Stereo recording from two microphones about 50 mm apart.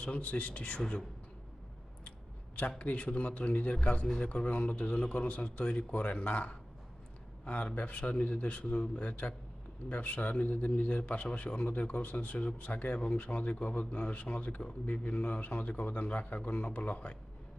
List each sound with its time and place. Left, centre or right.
0.0 s a man's voice: left
0.8 s a woman's voice: centre
2.6 s a man's voice: left